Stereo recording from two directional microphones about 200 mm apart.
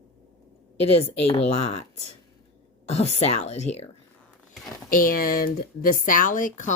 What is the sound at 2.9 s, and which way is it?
Speech, 30° left (ahead or behind).